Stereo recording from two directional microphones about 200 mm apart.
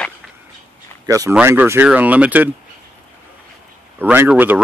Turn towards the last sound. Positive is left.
turn(degrees=-10)  # may be behind; listen again after turning